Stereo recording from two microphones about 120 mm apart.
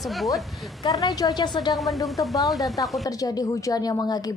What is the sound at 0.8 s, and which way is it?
Speech, 30° left (ahead or behind).